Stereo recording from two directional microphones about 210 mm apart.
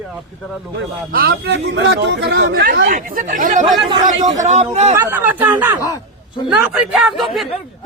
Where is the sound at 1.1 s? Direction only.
45° right (ahead or behind).